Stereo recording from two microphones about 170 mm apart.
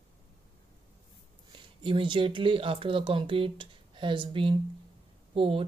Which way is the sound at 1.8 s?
30° right (ahead or behind).